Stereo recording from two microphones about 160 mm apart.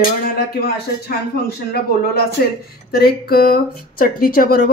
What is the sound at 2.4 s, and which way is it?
Speech, 75° left (ahead or behind).